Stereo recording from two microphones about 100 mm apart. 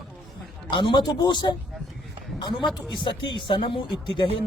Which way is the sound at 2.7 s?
55° left (ahead or behind).